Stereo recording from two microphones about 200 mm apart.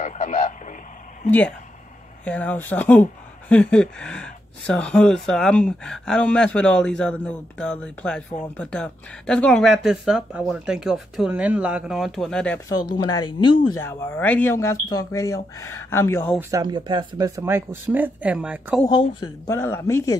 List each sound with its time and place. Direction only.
0.0 s radio: 40° left (ahead or behind)
2.2 s speech: 5° left (ahead or behind)
12.9 s speech: 20° left (ahead or behind)
16.3 s speech: 15° right (ahead or behind)
17.4 s speech: 10° right (ahead or behind)
18.9 s speech: 20° left (ahead or behind)